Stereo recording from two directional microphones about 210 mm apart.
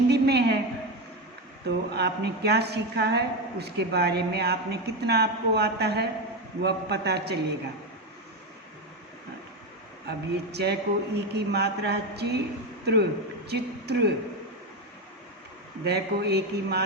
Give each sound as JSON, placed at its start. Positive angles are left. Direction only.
{"t": 0.1, "sound": "a sound", "side_deg": -50}
{"t": 1.6, "sound": "a woman's voice", "side_deg": -50}
{"t": 10.1, "sound": "a woman's voice", "side_deg": -50}
{"t": 15.8, "sound": "a woman's voice", "side_deg": -50}